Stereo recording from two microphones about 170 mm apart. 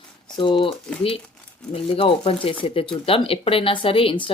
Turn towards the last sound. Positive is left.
turn(degrees=30)  # may be behind; listen again after turning